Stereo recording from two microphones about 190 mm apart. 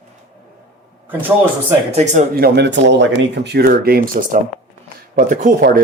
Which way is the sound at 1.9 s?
40° right (ahead or behind).